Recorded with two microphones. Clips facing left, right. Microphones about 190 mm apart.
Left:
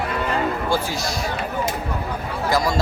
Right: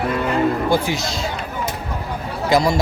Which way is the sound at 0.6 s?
20° right (ahead or behind).